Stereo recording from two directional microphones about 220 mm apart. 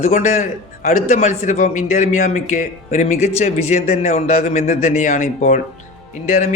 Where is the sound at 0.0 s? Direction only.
35° left (ahead or behind).